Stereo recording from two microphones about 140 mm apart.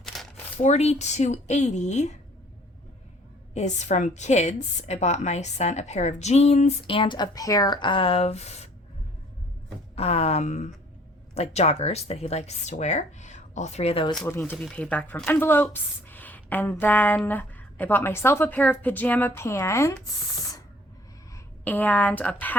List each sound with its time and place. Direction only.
0.0 s zipper: centre (ahead or behind)
0.6 s speech: 50° left (ahead or behind)
3.5 s a woman's voice: 55° left (ahead or behind)
9.9 s a woman's voice: 45° left (ahead or behind)
14.3 s speech: 15° left (ahead or behind)
21.3 s a woman's voice: 10° left (ahead or behind)